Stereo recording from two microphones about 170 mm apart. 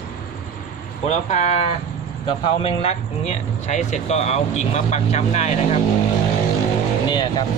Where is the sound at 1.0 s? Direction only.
40° left (ahead or behind).